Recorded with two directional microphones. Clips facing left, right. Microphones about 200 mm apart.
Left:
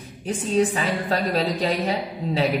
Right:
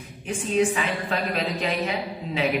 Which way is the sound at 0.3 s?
35° left (ahead or behind).